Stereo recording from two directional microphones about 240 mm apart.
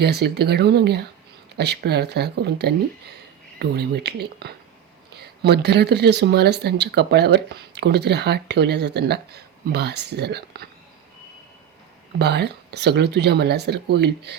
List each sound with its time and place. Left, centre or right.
0.0 s speech: right
12.2 s speech: right